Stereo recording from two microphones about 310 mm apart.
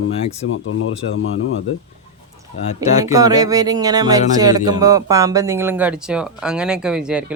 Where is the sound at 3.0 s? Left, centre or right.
Centre.